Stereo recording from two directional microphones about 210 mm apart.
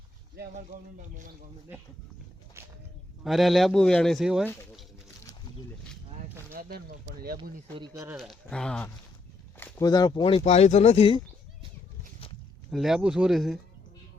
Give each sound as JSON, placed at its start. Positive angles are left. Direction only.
{"t": 0.3, "sound": "speech", "side_deg": -35}
{"t": 3.2, "sound": "a man's voice", "side_deg": 0}
{"t": 6.5, "sound": "speech", "side_deg": -45}
{"t": 7.8, "sound": "speech", "side_deg": -15}
{"t": 8.1, "sound": "a man's voice", "side_deg": 0}
{"t": 9.6, "sound": "speech", "side_deg": 15}
{"t": 12.7, "sound": "a man's voice", "side_deg": 0}